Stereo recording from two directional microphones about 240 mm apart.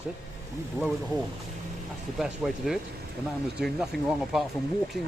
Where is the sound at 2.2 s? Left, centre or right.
Centre.